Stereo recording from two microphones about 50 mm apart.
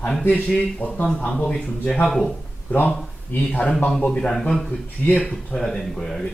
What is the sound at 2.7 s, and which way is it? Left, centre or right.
Speech, left.